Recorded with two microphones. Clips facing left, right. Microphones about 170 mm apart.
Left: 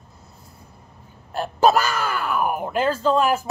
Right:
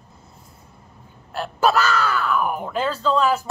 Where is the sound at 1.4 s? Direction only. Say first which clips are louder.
Left 2 dB; 45° left (ahead or behind).